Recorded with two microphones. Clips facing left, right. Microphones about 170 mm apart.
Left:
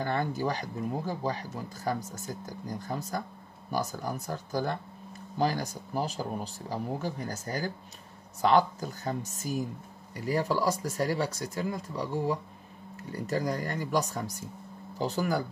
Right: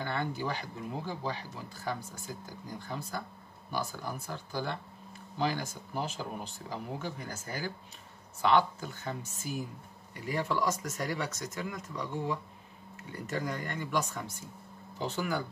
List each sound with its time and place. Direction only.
0.0 s speech: 40° left (ahead or behind)